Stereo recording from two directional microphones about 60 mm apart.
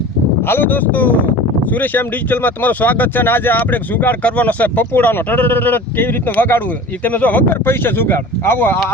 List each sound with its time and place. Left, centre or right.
0.4 s speech: left